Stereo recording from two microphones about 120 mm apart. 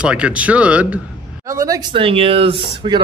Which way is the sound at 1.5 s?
25° right (ahead or behind).